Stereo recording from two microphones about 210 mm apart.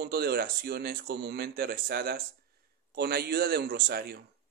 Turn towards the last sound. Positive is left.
turn(degrees=-50)  # may be behind; listen again after turning